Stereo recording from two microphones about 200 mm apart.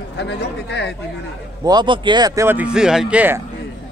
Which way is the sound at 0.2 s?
60° left (ahead or behind).